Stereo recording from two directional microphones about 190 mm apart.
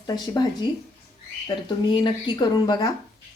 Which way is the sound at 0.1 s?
20° left (ahead or behind).